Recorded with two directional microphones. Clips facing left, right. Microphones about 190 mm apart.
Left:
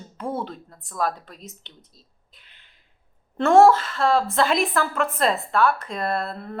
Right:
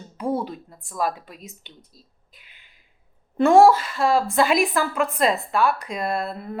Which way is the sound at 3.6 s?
Centre (ahead or behind).